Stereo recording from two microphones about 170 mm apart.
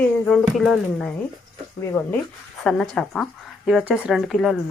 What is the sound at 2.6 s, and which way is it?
Speech, 5° left (ahead or behind).